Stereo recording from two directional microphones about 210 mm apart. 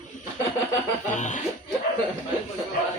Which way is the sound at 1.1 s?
35° left (ahead or behind).